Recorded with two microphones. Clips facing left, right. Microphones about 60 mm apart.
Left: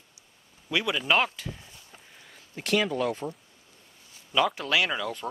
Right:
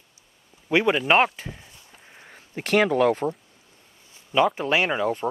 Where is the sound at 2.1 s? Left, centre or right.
Right.